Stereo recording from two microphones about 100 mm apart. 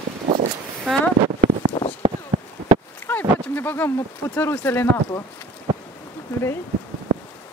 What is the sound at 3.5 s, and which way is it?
Speech, 20° left (ahead or behind).